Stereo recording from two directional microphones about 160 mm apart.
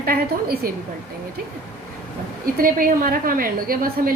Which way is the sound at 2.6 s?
60° right (ahead or behind).